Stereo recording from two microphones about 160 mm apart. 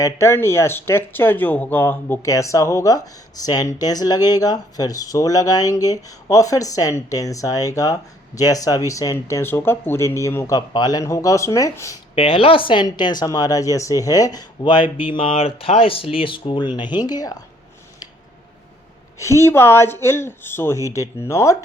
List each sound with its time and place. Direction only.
0.0 s speech: 15° left (ahead or behind)
12.1 s speech: 35° left (ahead or behind)
19.2 s speech: 15° left (ahead or behind)